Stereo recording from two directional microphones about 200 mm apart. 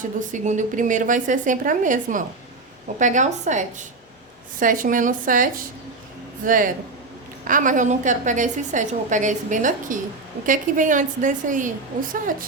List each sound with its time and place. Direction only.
0.2 s a woman's voice: 40° right (ahead or behind)